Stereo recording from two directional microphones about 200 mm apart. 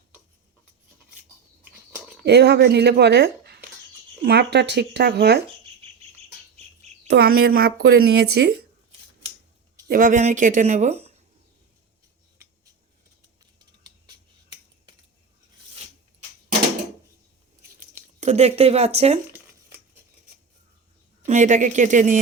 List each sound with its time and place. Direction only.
2.2 s speech: 55° right (ahead or behind)
7.1 s speech: 50° right (ahead or behind)
9.9 s a woman's voice: 40° right (ahead or behind)
17.7 s a sound: 35° right (ahead or behind)
21.2 s a woman's voice: 35° right (ahead or behind)